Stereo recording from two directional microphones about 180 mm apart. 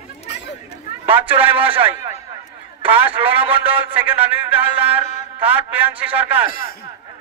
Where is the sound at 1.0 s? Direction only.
10° right (ahead or behind).